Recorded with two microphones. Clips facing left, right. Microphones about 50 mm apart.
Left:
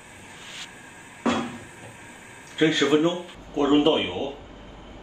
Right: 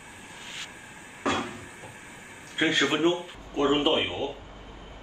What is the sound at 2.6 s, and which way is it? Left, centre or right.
Speech, right.